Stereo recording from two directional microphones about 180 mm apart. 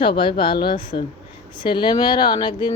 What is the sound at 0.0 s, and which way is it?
Speech, 25° left (ahead or behind).